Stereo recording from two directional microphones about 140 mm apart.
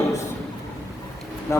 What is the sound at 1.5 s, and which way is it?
Speech, 20° left (ahead or behind).